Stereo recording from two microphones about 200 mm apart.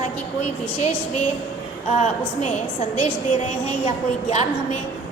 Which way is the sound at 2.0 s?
30° left (ahead or behind).